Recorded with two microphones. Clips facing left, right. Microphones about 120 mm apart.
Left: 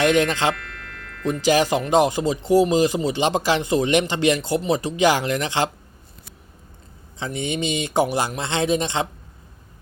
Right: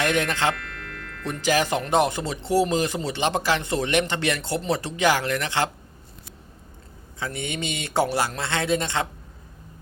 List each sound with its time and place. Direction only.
0.0 s speech: 15° left (ahead or behind)
0.5 s music: centre (ahead or behind)
1.2 s speech: 15° left (ahead or behind)
7.2 s speech: 20° left (ahead or behind)